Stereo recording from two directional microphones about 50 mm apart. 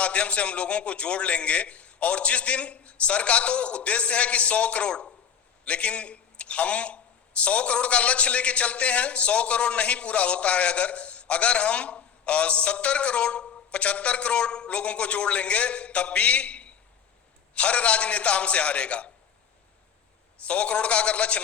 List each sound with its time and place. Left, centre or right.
0.0 s a man's voice: left
20.4 s a man's voice: left